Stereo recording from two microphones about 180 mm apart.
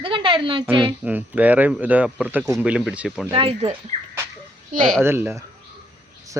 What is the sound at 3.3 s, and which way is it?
Speech, 30° right (ahead or behind).